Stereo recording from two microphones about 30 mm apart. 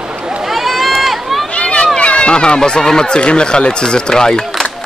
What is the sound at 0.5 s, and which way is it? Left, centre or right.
Run, centre.